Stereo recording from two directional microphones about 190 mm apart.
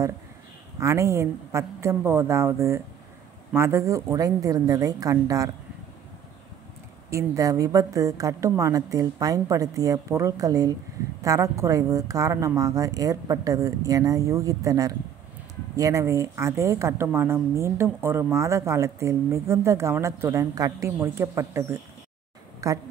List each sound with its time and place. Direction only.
0.7 s speech: 15° right (ahead or behind)
7.1 s a woman's voice: 15° right (ahead or behind)